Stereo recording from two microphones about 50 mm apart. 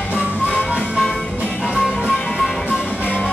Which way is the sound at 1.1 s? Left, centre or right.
Centre.